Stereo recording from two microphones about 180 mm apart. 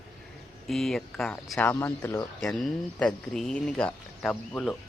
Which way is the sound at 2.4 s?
Centre (ahead or behind).